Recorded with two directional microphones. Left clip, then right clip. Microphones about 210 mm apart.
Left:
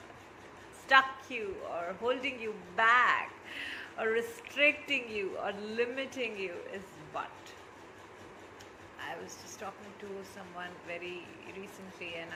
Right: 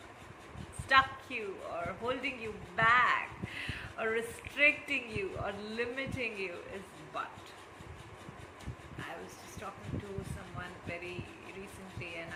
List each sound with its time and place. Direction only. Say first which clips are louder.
0.9 s speech: left 2 dB; 15° right (ahead or behind)
10.6 s speech: left 1 dB; 15° right (ahead or behind)